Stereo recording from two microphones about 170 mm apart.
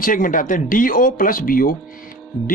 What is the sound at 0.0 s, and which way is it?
Speech, 55° left (ahead or behind).